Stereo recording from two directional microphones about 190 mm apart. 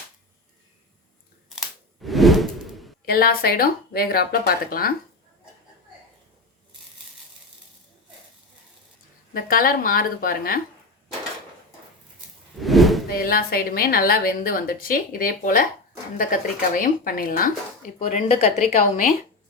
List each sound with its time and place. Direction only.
1.5 s scissors: centre (ahead or behind)
3.1 s a woman's voice: 55° left (ahead or behind)
9.3 s a woman's voice: 50° left (ahead or behind)
12.5 s whoosh: centre (ahead or behind)
13.1 s a woman's voice: 50° left (ahead or behind)
18.0 s a woman's voice: 35° left (ahead or behind)